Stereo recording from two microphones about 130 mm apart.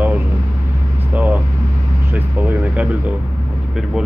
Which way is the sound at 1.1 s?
10° right (ahead or behind).